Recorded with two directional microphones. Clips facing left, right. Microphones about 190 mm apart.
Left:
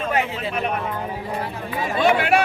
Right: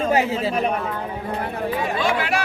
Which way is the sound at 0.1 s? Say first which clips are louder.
Right 4 dB; 30° right (ahead or behind).